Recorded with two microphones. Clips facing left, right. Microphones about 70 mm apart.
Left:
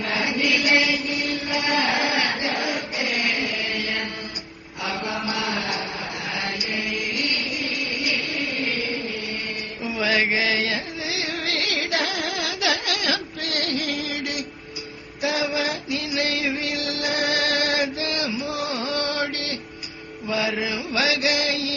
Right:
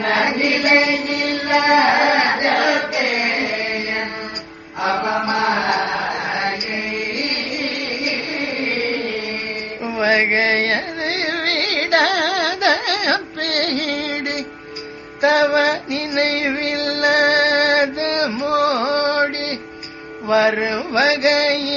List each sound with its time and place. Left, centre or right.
0.0 s chant: right
1.0 s a sound: right
3.1 s music: right
4.8 s mantra: right
5.8 s chant: right
8.0 s music: right
9.8 s carnatic music: right
15.2 s music: right
20.2 s mantra: right